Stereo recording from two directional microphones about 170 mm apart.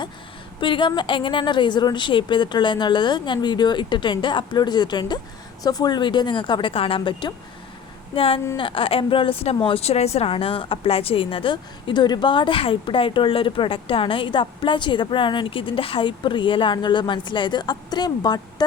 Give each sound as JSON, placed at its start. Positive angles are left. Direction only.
{"t": 0.6, "sound": "a woman's voice", "side_deg": 30}